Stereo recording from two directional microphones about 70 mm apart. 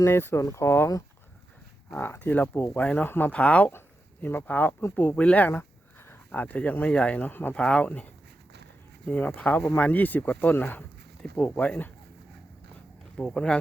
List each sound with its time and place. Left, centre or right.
0.1 s speech: left
1.9 s speech: left
3.1 s speech: left
3.7 s speech: left
5.5 s speech: left
7.5 s speech: centre
13.1 s speech: centre